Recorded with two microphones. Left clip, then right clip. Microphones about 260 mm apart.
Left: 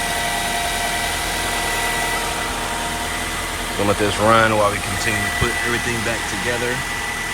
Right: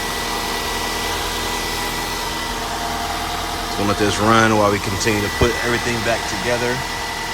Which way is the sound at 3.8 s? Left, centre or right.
Centre.